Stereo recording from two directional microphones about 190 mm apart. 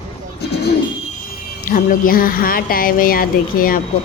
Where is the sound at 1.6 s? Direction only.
45° left (ahead or behind).